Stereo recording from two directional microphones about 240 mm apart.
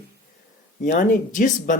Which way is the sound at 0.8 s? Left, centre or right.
Left.